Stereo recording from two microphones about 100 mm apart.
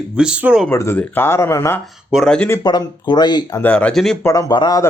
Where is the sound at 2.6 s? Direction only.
45° left (ahead or behind).